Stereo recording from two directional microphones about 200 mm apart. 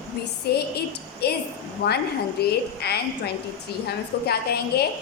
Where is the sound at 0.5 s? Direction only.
55° left (ahead or behind).